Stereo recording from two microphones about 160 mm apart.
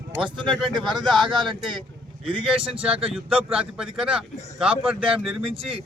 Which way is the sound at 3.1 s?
5° right (ahead or behind).